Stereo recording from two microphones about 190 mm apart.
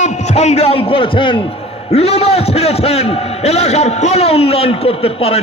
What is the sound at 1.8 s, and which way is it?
A man's voice, 30° left (ahead or behind).